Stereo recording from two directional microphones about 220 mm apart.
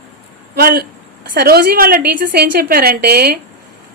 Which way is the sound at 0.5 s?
45° right (ahead or behind).